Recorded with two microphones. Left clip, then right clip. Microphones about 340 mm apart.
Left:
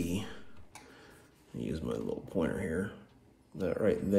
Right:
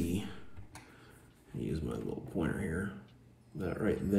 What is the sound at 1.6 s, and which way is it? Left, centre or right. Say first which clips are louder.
Speech: left 2 dB; centre.